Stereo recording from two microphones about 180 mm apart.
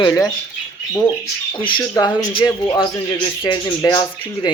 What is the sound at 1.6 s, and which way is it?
Speech, 25° left (ahead or behind).